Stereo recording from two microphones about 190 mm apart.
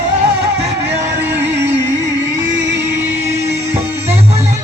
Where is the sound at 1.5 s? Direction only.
65° right (ahead or behind).